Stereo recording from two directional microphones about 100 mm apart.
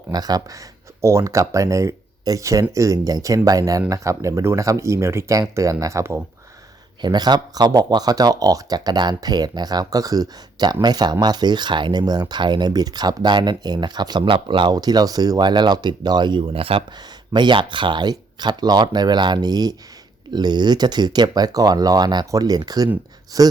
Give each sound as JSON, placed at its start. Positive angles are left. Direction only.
{"t": 0.1, "sound": "speech", "side_deg": -40}
{"t": 7.0, "sound": "speech", "side_deg": -45}
{"t": 14.7, "sound": "speech", "side_deg": -40}
{"t": 17.0, "sound": "speech", "side_deg": -50}